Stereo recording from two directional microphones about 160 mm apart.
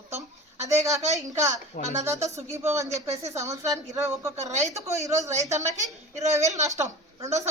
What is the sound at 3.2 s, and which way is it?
A man's voice, 20° right (ahead or behind).